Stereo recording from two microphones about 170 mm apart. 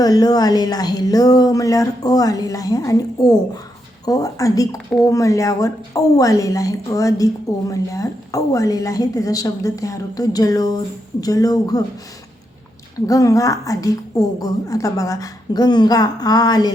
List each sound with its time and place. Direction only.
0.0 s speech: 20° left (ahead or behind)
13.1 s speech: 20° left (ahead or behind)